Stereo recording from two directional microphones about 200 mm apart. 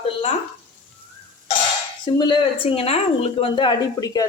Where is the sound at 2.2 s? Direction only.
25° left (ahead or behind).